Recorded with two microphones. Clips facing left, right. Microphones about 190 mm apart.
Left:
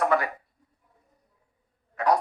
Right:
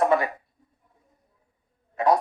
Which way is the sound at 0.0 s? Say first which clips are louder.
Right 3 dB; 25° right (ahead or behind).